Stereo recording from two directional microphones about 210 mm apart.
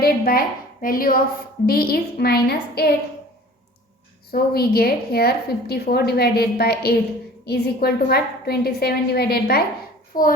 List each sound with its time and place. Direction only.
0.0 s a woman's voice: 45° left (ahead or behind)
4.3 s a woman's voice: 45° left (ahead or behind)